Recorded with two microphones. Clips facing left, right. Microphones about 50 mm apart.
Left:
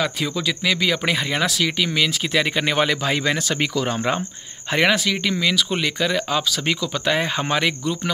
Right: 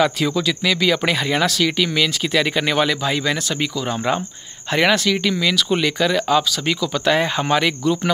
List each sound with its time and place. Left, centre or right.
0.2 s speech: centre
4.7 s speech: centre